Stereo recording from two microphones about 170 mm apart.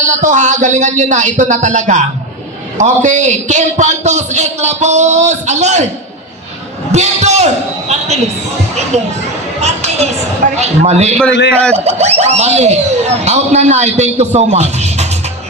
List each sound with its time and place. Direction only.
0.1 s a man's voice: 45° right (ahead or behind)
6.9 s a man's voice: 40° right (ahead or behind)
9.6 s a sound: 40° right (ahead or behind)
10.6 s speech: 40° right (ahead or behind)
11.3 s a man's voice: 90° left
11.9 s speech: 40° right (ahead or behind)